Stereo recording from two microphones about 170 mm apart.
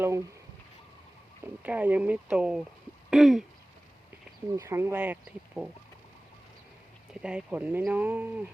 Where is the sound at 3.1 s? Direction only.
Centre (ahead or behind).